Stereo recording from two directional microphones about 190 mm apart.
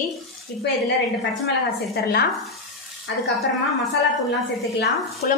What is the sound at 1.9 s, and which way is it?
Speech, 55° left (ahead or behind).